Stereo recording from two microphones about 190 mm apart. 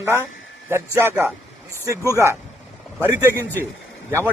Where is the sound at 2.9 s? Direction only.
10° right (ahead or behind).